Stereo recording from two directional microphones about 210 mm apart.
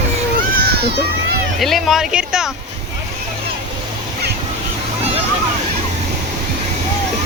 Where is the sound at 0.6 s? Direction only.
50° right (ahead or behind).